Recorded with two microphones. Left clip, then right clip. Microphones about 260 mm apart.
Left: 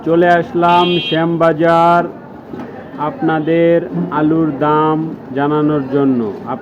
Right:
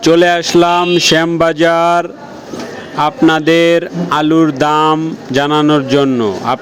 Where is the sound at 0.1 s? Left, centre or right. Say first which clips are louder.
Right 2 dB; right.